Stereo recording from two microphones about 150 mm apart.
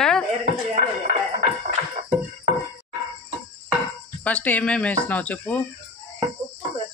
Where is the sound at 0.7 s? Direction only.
50° right (ahead or behind).